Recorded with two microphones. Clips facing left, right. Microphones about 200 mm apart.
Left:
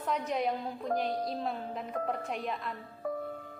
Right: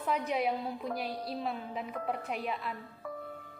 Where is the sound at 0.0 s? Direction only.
5° right (ahead or behind).